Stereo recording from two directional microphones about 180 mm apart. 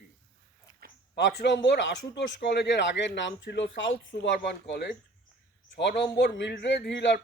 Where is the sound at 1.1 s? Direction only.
70° left (ahead or behind).